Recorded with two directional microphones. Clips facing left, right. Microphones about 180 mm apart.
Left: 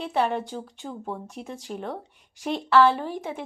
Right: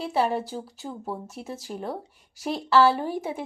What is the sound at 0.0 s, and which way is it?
Speech, 5° right (ahead or behind).